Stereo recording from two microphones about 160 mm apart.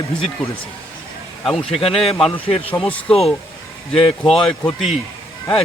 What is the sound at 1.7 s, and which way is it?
Speech, 35° left (ahead or behind).